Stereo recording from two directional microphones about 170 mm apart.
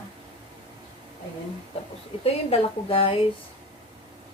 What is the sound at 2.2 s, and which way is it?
Speech, 35° left (ahead or behind).